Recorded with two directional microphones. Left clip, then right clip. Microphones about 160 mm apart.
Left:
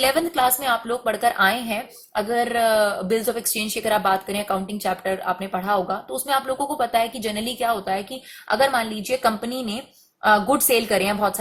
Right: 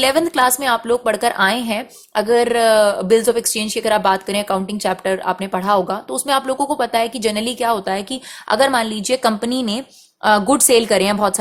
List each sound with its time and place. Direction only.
0.0 s a woman's voice: 40° right (ahead or behind)